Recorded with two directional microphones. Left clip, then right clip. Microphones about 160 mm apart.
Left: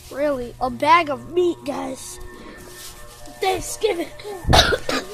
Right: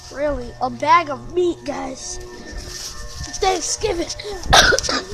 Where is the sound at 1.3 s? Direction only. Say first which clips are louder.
Right 1 dB; 5° left (ahead or behind).